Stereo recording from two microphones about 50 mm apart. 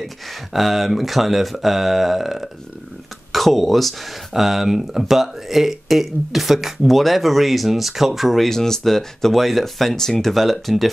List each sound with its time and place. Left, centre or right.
0.0 s speech: centre